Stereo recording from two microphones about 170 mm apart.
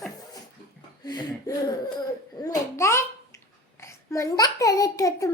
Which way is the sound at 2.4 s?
15° left (ahead or behind).